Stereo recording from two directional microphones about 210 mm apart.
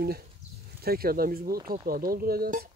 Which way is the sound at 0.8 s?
45° right (ahead or behind).